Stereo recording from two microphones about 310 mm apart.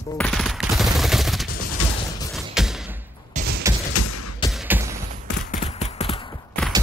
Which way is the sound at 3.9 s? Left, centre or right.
Left.